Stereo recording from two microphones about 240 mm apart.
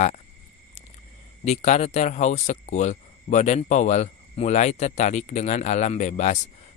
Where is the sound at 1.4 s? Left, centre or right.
Left.